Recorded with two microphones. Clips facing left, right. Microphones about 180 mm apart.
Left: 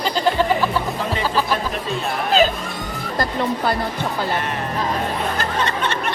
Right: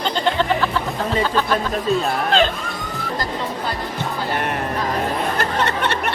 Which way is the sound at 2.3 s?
5° left (ahead or behind).